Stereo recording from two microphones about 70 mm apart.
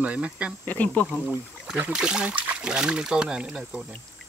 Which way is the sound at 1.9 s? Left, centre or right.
Centre.